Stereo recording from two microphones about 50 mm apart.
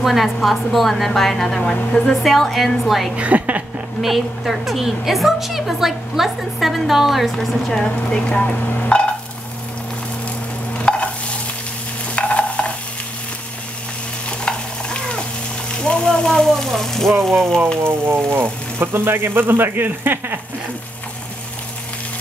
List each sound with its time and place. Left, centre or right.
0.0 s a woman's voice: centre
2.2 s a woman's voice: centre
3.2 s a woman's voice: right
4.0 s a woman's voice: centre; by 9.0 s left
10.8 s stir: left
12.2 s stir: left
14.4 s stir: centre
15.7 s a sound: centre
17.8 s speech: right